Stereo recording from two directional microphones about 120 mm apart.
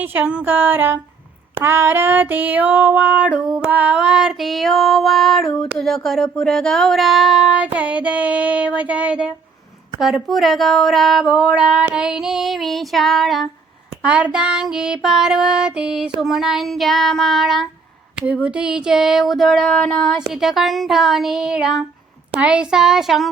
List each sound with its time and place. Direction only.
0.0 s female singing: 15° right (ahead or behind)
10.0 s child singing: centre (ahead or behind)
19.6 s a sound: 10° left (ahead or behind)
20.1 s child singing: 5° right (ahead or behind)